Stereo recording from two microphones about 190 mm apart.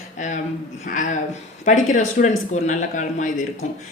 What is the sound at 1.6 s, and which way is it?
A woman's voice, 40° left (ahead or behind).